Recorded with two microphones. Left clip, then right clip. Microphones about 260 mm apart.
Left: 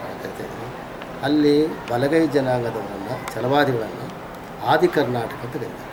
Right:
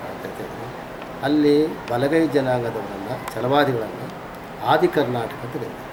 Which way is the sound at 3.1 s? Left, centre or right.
Centre.